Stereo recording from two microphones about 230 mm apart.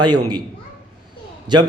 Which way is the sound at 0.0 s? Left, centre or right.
Centre.